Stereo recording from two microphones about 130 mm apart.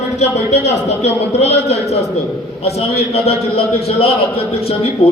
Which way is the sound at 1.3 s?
55° left (ahead or behind).